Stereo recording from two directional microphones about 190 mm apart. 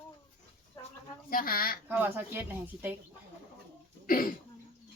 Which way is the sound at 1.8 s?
10° right (ahead or behind).